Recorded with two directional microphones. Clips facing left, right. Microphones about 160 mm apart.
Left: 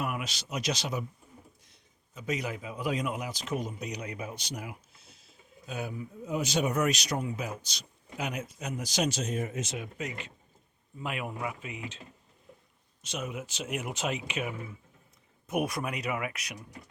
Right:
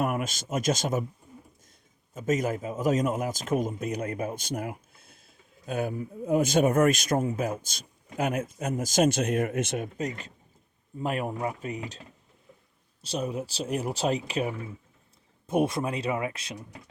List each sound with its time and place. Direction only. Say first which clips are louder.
0.0 s a man's voice: right 6 dB; 45° right (ahead or behind)
2.1 s a man's voice: right 7 dB; 45° right (ahead or behind); by 16.6 s 25° right (ahead or behind)